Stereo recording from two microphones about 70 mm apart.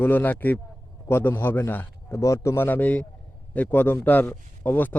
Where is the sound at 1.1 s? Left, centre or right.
Left.